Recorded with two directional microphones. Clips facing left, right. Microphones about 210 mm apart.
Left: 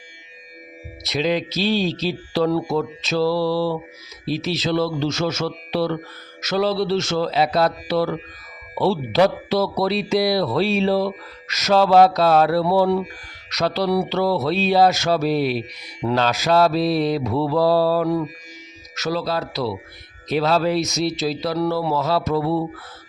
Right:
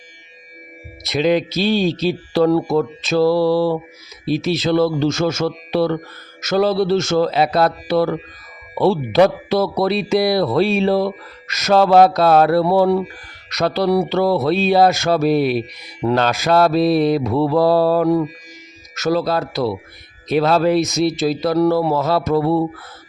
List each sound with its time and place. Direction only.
1.0 s speech: 55° right (ahead or behind)